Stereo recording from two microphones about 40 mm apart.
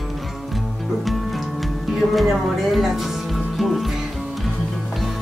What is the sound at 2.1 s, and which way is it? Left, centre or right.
Speech, centre.